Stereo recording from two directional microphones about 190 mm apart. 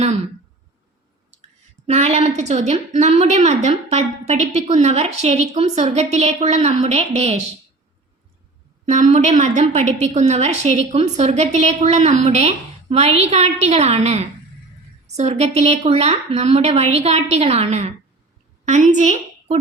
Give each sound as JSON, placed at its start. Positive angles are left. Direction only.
{"t": 1.9, "sound": "a woman's voice", "side_deg": -35}
{"t": 8.9, "sound": "a woman's voice", "side_deg": -40}